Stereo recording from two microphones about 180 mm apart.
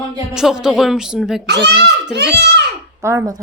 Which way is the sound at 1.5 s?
65° right (ahead or behind).